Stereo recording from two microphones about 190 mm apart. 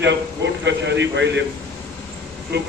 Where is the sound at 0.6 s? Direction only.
70° right (ahead or behind).